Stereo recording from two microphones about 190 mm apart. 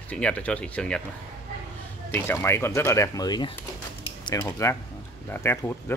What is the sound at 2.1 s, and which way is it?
Speech, 10° left (ahead or behind).